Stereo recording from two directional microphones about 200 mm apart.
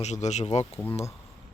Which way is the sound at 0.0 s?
35° left (ahead or behind).